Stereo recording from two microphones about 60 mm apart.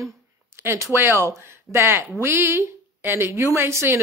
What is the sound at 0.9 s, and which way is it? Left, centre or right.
A woman's voice, right.